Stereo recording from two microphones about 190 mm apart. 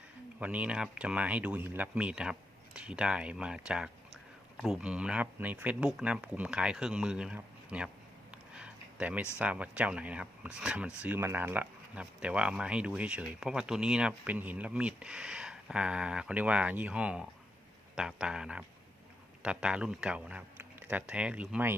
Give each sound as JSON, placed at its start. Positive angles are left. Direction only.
{"t": 0.3, "sound": "speech", "side_deg": -5}
{"t": 8.5, "sound": "a sound", "side_deg": -5}
{"t": 9.4, "sound": "speech", "side_deg": -5}